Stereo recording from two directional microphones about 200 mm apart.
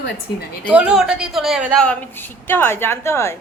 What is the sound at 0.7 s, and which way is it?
A woman's voice, 5° right (ahead or behind).